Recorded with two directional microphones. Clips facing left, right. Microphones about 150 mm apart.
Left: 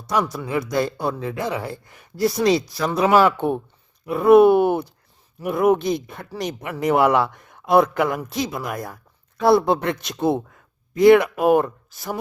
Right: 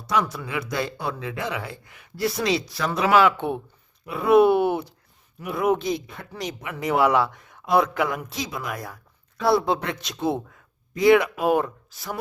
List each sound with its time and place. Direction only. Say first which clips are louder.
0.1 s a man's voice: left 3 dB; 40° left (ahead or behind)